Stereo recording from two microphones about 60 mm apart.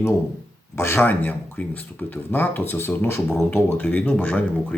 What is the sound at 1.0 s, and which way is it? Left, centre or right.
Speech, left.